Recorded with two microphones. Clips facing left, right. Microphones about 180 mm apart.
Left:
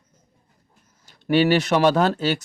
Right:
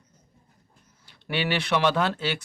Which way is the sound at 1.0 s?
45° left (ahead or behind).